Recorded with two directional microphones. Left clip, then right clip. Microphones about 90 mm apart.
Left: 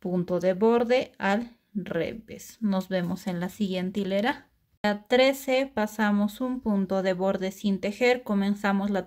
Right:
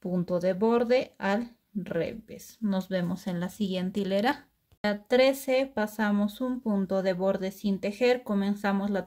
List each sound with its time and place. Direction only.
0.0 s speech: 25° left (ahead or behind); by 4.4 s 5° right (ahead or behind)
4.8 s speech: 20° left (ahead or behind)